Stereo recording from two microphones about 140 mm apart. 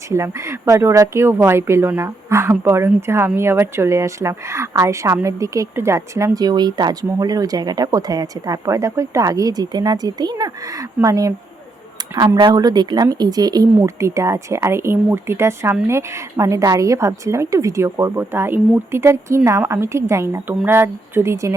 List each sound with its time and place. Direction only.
0.1 s speech: 20° right (ahead or behind)